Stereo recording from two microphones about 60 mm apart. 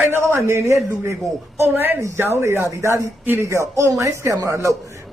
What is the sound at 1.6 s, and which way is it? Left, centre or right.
Speech, right.